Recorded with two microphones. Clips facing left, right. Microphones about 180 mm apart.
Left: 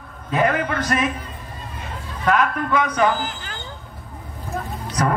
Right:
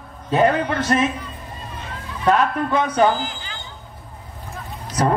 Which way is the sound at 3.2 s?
50° left (ahead or behind).